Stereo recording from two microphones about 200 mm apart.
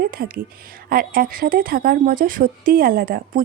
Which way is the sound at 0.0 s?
45° right (ahead or behind).